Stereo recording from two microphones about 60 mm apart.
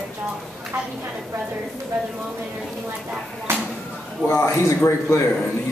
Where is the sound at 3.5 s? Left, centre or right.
Right.